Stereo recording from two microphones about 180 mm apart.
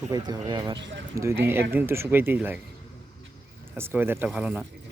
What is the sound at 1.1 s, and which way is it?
Speech, 15° right (ahead or behind).